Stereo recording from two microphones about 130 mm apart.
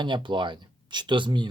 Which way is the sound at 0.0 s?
40° right (ahead or behind).